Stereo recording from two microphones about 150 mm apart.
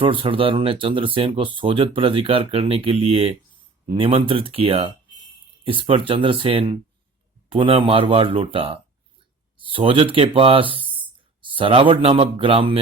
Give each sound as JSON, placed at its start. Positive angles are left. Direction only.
{"t": 0.0, "sound": "speech", "side_deg": -35}